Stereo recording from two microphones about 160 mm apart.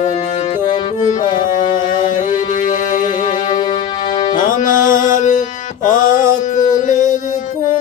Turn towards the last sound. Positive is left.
turn(degrees=50)  # may be behind; listen again after turning